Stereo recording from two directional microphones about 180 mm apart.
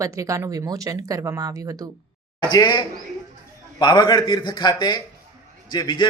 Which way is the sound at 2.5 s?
20° left (ahead or behind).